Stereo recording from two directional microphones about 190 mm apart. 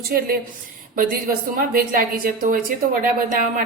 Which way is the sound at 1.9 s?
50° right (ahead or behind).